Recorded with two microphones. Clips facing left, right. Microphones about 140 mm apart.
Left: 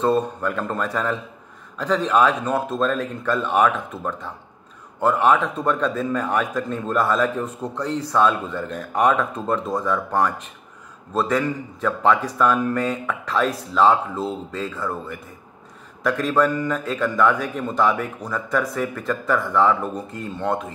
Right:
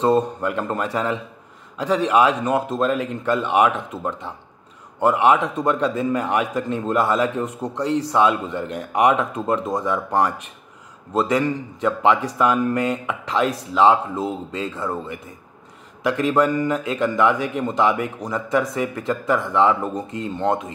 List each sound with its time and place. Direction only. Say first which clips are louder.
0.0 s a man's voice: right 2 dB; 15° right (ahead or behind)
16.0 s a man's voice: right 1 dB; 15° right (ahead or behind)